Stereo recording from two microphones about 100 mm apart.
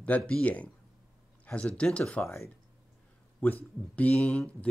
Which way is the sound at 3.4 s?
15° left (ahead or behind).